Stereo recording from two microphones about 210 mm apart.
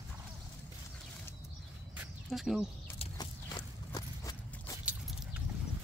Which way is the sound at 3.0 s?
20° left (ahead or behind).